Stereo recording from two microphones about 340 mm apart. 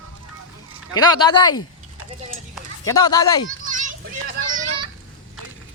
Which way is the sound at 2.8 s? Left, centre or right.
Centre.